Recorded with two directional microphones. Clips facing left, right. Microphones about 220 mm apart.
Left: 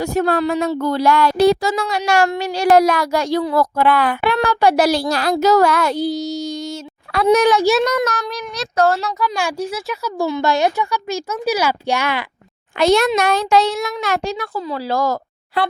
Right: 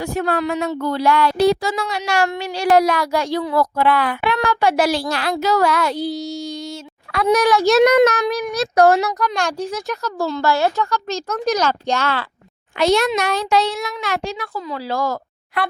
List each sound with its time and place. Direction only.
0.0 s speech: 40° left (ahead or behind)
4.3 s speech: 35° left (ahead or behind)
7.1 s a child's voice: 30° left (ahead or behind)
8.3 s speech: 15° right (ahead or behind)
9.2 s speech: centre (ahead or behind)
12.8 s speech: 50° left (ahead or behind)